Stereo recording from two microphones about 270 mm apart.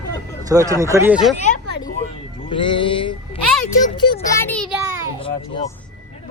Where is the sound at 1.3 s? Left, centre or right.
Left.